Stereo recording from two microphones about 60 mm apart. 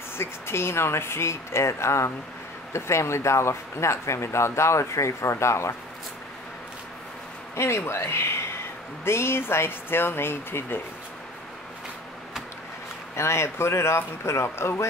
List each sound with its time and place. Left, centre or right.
0.2 s speech: left
7.5 s speech: left
13.1 s speech: left